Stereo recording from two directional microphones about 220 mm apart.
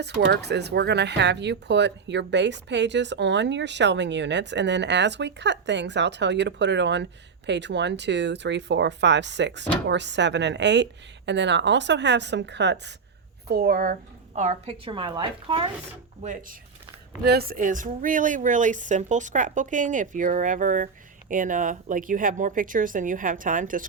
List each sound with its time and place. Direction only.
0.0 s a woman's voice: 50° right (ahead or behind)
14.3 s a woman's voice: 30° right (ahead or behind)
16.2 s a woman's voice: 35° right (ahead or behind)